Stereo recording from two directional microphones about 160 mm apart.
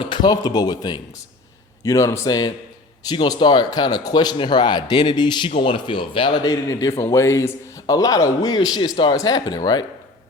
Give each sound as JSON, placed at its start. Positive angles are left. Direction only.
{"t": 0.0, "sound": "speech", "side_deg": 30}